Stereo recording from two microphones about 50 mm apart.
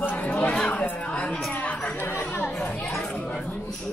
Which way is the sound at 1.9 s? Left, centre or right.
Left.